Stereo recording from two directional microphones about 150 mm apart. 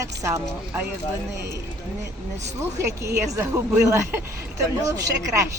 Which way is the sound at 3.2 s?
20° right (ahead or behind).